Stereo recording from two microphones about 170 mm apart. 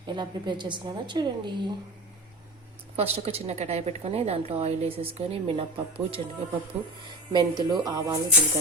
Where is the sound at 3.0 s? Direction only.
35° right (ahead or behind).